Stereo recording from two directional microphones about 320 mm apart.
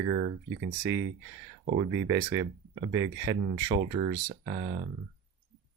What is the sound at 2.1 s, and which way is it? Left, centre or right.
Speech, centre.